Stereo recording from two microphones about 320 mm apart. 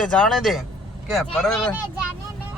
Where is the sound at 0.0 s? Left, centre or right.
Centre.